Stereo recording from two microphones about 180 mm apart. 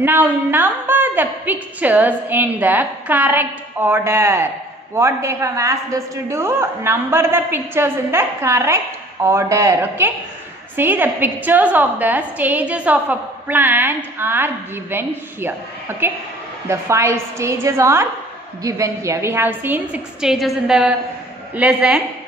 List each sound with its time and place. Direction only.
0.0 s a woman's voice: 10° right (ahead or behind)